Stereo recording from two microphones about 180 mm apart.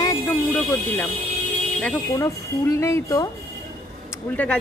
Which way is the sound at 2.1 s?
20° left (ahead or behind).